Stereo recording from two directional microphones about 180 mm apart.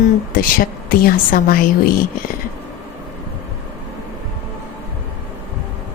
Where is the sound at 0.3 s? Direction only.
50° left (ahead or behind).